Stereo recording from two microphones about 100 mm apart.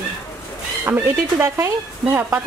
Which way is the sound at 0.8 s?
25° right (ahead or behind).